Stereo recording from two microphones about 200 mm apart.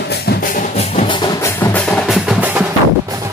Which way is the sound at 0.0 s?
55° left (ahead or behind).